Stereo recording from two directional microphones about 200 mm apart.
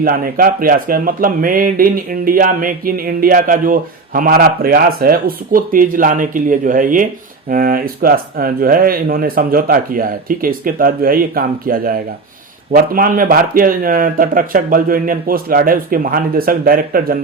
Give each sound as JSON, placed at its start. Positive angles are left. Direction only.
{"t": 0.0, "sound": "speech", "side_deg": -45}